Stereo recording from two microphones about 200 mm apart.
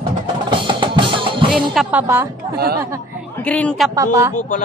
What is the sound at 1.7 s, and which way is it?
Speech, 5° right (ahead or behind).